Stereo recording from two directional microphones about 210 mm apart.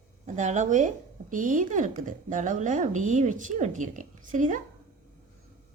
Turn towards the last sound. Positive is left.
turn(degrees=-40)  # may be behind; listen again after turning